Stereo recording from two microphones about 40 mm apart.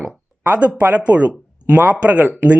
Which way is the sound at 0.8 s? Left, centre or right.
Right.